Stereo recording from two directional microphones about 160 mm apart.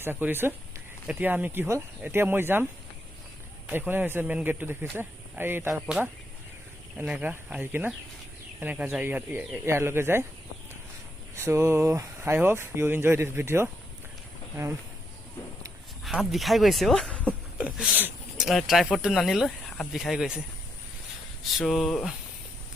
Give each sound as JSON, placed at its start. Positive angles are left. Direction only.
{"t": 0.0, "sound": "speech", "side_deg": -10}
{"t": 3.7, "sound": "speech", "side_deg": -10}
{"t": 11.3, "sound": "speech", "side_deg": -15}
{"t": 16.0, "sound": "speech", "side_deg": 0}
{"t": 21.6, "sound": "speech", "side_deg": 0}